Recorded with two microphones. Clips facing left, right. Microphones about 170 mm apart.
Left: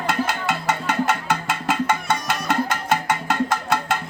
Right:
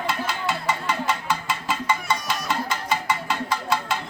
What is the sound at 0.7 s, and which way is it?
Music, 50° left (ahead or behind).